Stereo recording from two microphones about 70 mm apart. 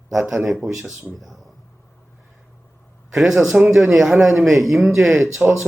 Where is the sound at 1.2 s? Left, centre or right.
Centre.